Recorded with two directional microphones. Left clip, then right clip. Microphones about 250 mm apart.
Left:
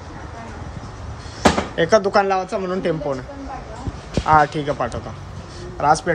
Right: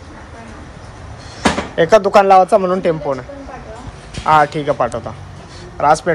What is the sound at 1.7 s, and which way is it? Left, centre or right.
Speech, centre.